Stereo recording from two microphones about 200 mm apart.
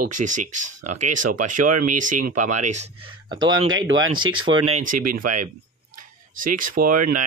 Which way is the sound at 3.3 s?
20° right (ahead or behind).